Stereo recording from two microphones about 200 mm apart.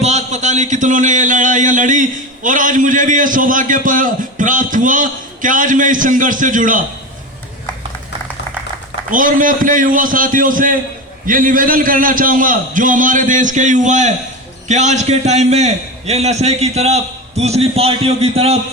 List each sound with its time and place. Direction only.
0.0 s a man's voice: 35° right (ahead or behind)
9.1 s a man's voice: 40° right (ahead or behind)